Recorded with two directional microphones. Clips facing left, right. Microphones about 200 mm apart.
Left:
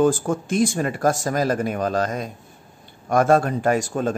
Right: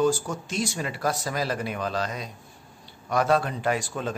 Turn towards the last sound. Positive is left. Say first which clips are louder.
# left 6 dB
turn(degrees=45)  # may be behind; listen again after turning